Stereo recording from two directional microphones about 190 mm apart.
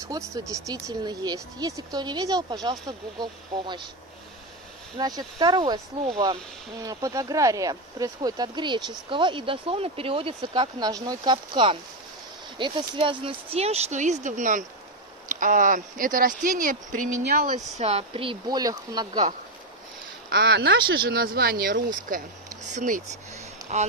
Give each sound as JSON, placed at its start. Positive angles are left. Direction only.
{"t": 0.1, "sound": "speech", "side_deg": -15}
{"t": 4.9, "sound": "speech", "side_deg": -20}
{"t": 17.7, "sound": "speech", "side_deg": -35}
{"t": 20.2, "sound": "speech", "side_deg": -55}
{"t": 23.6, "sound": "a sound", "side_deg": -15}